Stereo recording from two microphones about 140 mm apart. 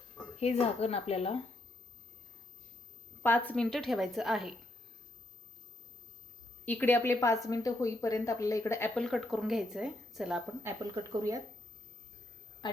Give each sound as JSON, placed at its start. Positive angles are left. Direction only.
{"t": 0.3, "sound": "speech", "side_deg": 50}
{"t": 3.2, "sound": "speech", "side_deg": 10}
{"t": 6.7, "sound": "a woman's voice", "side_deg": 15}
{"t": 9.0, "sound": "speech", "side_deg": 0}
{"t": 10.9, "sound": "speech", "side_deg": -25}